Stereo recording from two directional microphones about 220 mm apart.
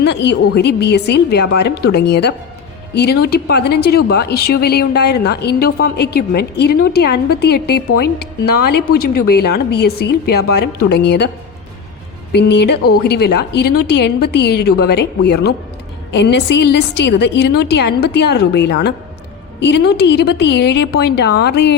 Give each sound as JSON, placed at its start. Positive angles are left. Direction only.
{"t": 0.0, "sound": "a woman's voice", "side_deg": 50}
{"t": 8.9, "sound": "a woman's voice", "side_deg": 45}
{"t": 12.3, "sound": "a woman's voice", "side_deg": 50}